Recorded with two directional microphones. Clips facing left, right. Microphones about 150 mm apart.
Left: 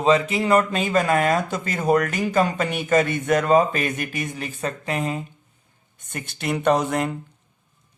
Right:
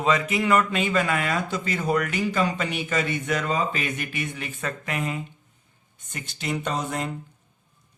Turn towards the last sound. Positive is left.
turn(degrees=70)  # may be behind; listen again after turning